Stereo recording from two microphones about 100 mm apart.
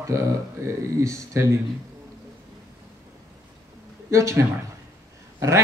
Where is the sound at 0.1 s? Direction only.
30° right (ahead or behind).